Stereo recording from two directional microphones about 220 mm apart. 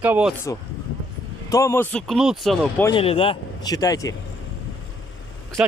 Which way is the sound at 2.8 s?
25° left (ahead or behind).